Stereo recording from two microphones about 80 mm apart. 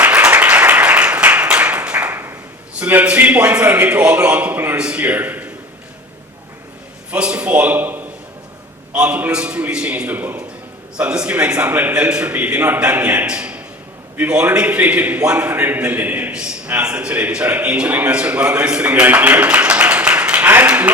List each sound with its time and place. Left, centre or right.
0.0 s applause: centre
2.1 s a sound: right
2.9 s a man's voice: centre
7.1 s a man's voice: centre
10.1 s a man's voice: right
10.9 s a man's voice: centre